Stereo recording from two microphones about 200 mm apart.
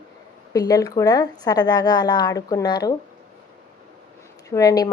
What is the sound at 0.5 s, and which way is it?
A woman's voice, 20° left (ahead or behind).